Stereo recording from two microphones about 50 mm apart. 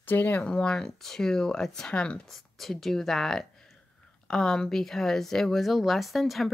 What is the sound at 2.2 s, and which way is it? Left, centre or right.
Speech, centre.